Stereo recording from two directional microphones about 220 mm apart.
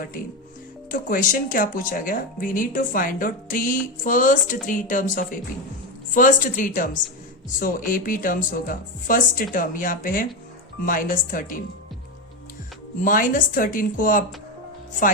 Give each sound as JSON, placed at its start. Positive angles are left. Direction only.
{"t": 0.9, "sound": "speech", "side_deg": 40}
{"t": 13.0, "sound": "speech", "side_deg": 35}